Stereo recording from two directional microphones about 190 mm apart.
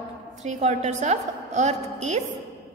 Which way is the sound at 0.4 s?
35° right (ahead or behind).